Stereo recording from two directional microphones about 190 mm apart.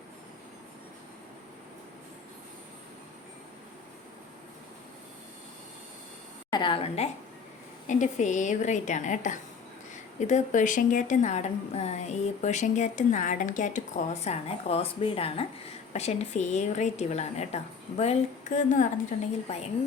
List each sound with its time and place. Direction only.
6.5 s a woman's voice: 25° left (ahead or behind)